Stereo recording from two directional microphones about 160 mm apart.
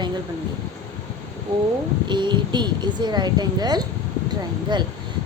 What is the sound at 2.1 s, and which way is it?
Speech, 30° right (ahead or behind).